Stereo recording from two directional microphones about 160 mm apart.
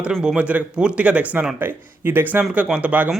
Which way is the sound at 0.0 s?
5° right (ahead or behind).